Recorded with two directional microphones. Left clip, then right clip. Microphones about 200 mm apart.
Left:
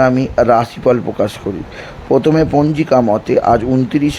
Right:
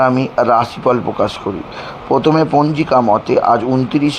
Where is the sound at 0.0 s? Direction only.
30° left (ahead or behind).